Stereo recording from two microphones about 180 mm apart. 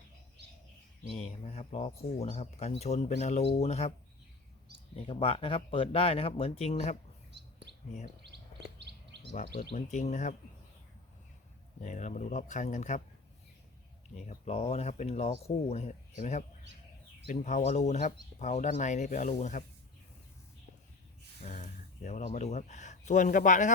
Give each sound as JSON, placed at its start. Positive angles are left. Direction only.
{"t": 1.2, "sound": "speech", "side_deg": 35}
{"t": 5.0, "sound": "speech", "side_deg": 30}
{"t": 8.8, "sound": "bird", "side_deg": -70}
{"t": 9.3, "sound": "speech", "side_deg": 45}
{"t": 11.8, "sound": "speech", "side_deg": 40}
{"t": 14.2, "sound": "speech", "side_deg": 40}
{"t": 21.4, "sound": "speech", "side_deg": 40}